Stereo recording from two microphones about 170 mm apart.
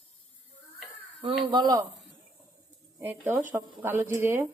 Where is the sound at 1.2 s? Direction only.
30° right (ahead or behind).